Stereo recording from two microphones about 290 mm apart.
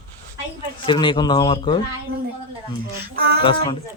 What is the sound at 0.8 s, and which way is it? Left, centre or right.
Speech, centre.